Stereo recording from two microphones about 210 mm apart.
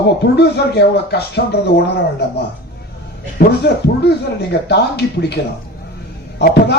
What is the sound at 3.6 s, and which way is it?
Speech, 50° left (ahead or behind).